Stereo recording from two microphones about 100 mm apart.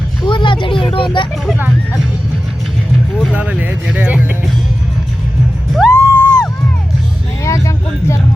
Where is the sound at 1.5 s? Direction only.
20° right (ahead or behind).